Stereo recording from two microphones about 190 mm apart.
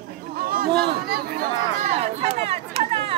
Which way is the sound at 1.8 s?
35° right (ahead or behind).